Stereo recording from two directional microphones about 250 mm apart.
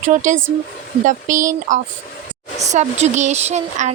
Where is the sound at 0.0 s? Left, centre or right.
Right.